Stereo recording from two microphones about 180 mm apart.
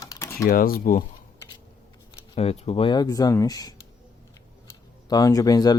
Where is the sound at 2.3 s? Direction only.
35° left (ahead or behind).